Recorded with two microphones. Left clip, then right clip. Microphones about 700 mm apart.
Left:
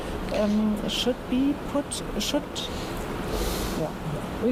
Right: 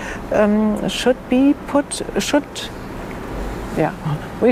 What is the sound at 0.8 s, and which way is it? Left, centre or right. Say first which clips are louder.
Speech: right 9 dB; right.